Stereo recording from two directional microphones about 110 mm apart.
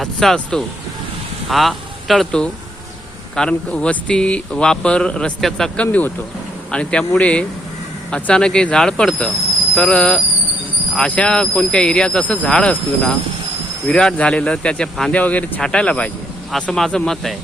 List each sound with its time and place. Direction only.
0.0 s speech: 5° left (ahead or behind)